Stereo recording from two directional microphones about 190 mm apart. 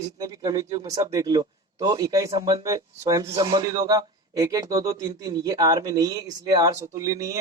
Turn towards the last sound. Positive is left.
turn(degrees=-20)  # may be behind; listen again after turning